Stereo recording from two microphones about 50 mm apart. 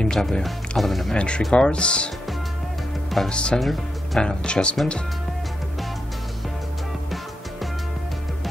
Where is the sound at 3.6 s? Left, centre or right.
Centre.